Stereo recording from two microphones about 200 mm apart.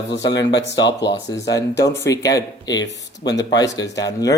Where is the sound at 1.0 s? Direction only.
20° left (ahead or behind).